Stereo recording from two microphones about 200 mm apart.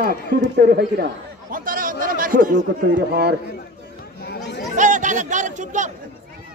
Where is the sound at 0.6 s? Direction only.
50° right (ahead or behind).